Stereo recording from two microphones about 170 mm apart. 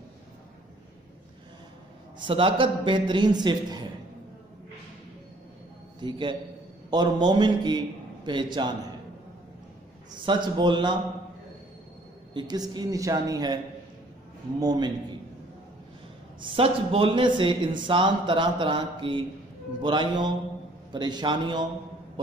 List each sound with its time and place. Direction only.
2.2 s speech: 30° right (ahead or behind)
5.9 s a man's voice: 30° right (ahead or behind)
10.2 s speech: 25° right (ahead or behind)
12.4 s speech: 25° right (ahead or behind)
14.6 s speech: 25° right (ahead or behind)
16.3 s speech: 30° right (ahead or behind)